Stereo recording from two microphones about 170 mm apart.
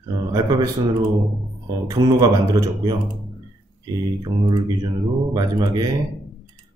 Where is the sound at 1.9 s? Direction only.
20° right (ahead or behind).